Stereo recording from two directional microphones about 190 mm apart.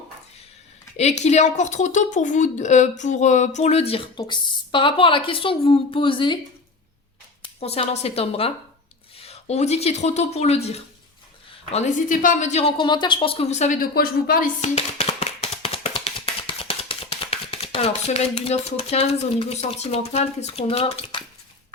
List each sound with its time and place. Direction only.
0.9 s speech: 35° left (ahead or behind)
7.6 s a woman's voice: 30° left (ahead or behind)